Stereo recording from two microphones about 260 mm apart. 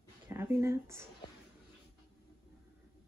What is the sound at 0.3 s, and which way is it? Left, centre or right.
Speech, centre.